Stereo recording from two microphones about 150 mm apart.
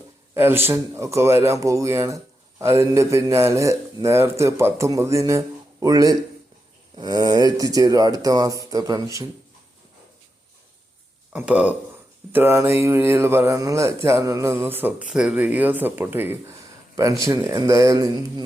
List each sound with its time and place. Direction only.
0.3 s speech: 15° right (ahead or behind)
11.3 s speech: 10° right (ahead or behind); by 18.4 s 25° right (ahead or behind)